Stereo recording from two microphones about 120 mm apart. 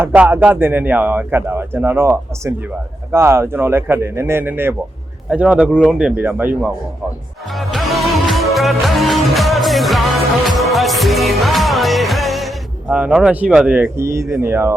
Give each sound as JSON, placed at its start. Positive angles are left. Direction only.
{"t": 0.0, "sound": "speech", "side_deg": -15}
{"t": 7.5, "sound": "music", "side_deg": 0}
{"t": 12.9, "sound": "speech", "side_deg": -10}